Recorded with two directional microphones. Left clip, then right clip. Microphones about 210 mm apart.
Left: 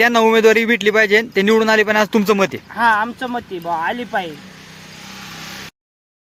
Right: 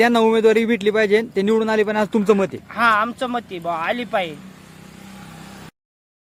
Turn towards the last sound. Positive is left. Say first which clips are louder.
# left 8 dB
turn(degrees=-40)  # may be behind; listen again after turning